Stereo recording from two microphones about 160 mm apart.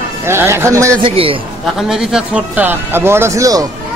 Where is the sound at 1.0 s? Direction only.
35° right (ahead or behind).